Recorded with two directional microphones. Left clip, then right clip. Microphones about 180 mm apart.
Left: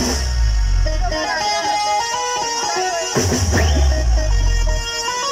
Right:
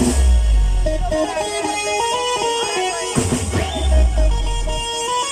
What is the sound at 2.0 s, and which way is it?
Music, 15° right (ahead or behind).